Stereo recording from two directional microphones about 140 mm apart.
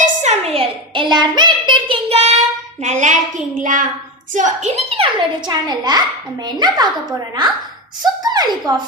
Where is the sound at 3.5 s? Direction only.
70° right (ahead or behind).